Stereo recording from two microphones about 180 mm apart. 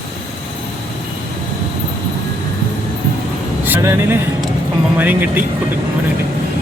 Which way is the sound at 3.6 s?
15° right (ahead or behind).